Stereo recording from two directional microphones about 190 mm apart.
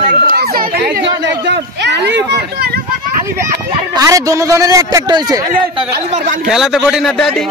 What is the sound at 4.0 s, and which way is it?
A man's voice, 15° right (ahead or behind).